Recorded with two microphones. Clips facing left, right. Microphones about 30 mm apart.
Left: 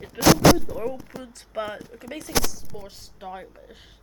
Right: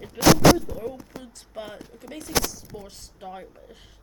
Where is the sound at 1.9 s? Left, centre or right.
Left.